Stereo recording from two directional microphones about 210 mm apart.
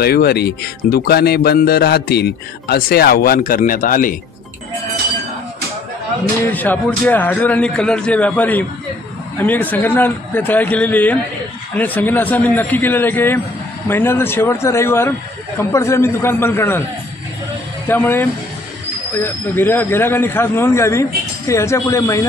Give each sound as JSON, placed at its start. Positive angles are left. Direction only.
{"t": 0.0, "sound": "speech", "side_deg": 50}
{"t": 6.5, "sound": "speech", "side_deg": 10}
{"t": 17.8, "sound": "speech", "side_deg": 10}